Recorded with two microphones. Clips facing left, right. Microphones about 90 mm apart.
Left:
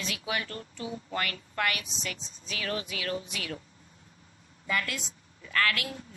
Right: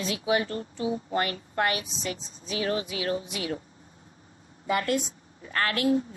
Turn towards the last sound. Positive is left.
turn(degrees=-30)  # may be behind; listen again after turning